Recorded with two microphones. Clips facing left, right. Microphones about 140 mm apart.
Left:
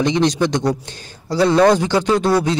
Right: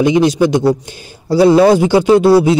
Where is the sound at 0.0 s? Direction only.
10° right (ahead or behind).